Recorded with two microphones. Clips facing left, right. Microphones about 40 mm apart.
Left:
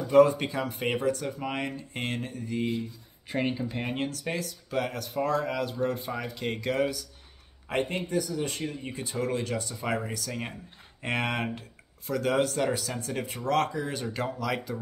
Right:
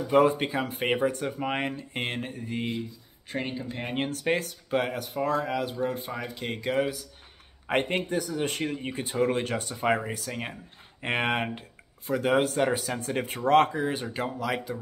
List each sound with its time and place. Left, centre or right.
0.1 s speech: right
3.3 s speech: centre
4.1 s speech: right
4.6 s speech: right
5.1 s speech: centre
7.6 s speech: right
9.9 s speech: right
13.0 s speech: right; by 14.8 s centre